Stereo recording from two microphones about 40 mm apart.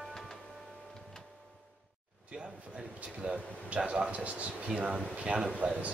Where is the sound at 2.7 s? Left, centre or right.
Right.